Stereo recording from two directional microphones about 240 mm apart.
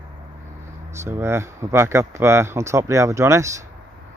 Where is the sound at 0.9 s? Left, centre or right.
Centre.